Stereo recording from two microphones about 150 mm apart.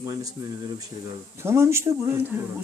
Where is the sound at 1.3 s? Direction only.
15° right (ahead or behind).